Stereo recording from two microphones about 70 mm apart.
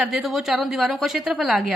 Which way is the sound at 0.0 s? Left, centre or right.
Centre.